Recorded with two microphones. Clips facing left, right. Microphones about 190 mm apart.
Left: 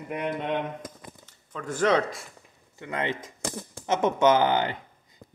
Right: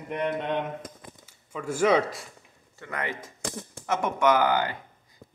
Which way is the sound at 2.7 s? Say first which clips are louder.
Left 3 dB; 20° left (ahead or behind).